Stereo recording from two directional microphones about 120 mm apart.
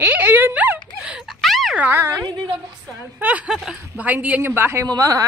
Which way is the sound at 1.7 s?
15° right (ahead or behind).